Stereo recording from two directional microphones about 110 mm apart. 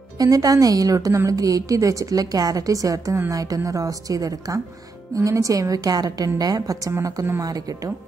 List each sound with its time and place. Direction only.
0.2 s a woman's voice: 35° right (ahead or behind)